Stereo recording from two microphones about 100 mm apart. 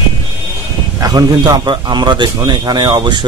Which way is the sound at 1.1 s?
45° right (ahead or behind).